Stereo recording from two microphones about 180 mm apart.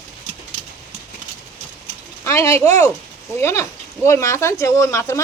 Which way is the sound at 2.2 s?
15° left (ahead or behind).